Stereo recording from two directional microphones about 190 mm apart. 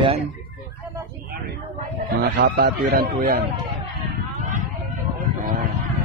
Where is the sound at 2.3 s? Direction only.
55° right (ahead or behind).